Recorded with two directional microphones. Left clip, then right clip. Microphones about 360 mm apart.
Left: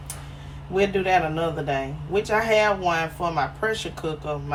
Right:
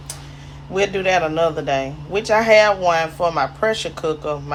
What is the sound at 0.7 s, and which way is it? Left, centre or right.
A man's voice, right.